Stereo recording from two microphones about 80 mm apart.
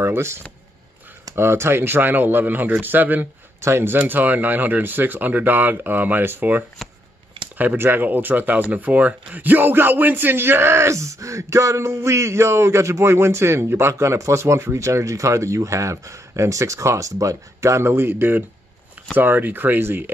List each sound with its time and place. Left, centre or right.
0.0 s speech: right
6.8 s shuffling cards: centre
7.5 s speech: right